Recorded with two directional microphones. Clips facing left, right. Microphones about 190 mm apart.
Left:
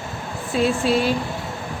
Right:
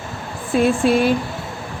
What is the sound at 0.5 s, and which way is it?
Speech, 55° right (ahead or behind).